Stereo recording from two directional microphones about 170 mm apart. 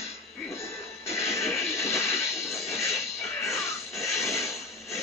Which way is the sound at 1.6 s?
15° left (ahead or behind).